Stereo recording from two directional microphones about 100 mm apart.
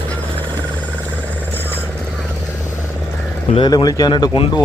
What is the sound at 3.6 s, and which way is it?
Speech, 45° left (ahead or behind).